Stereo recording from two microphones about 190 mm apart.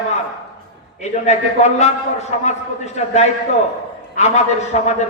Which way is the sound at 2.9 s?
35° left (ahead or behind).